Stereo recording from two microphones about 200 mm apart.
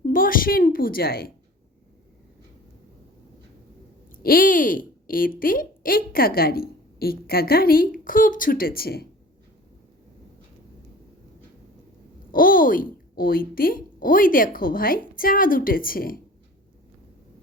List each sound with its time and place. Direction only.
0.0 s a woman's voice: 45° left (ahead or behind)
4.2 s speech: 45° left (ahead or behind)
12.3 s speech: 45° left (ahead or behind)